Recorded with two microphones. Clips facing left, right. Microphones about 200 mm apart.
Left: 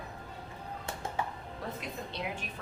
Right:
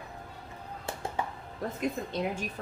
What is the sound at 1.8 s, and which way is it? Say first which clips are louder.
Speech: right 8 dB; 45° right (ahead or behind).